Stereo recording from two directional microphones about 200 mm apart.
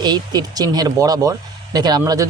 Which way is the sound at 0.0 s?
20° right (ahead or behind).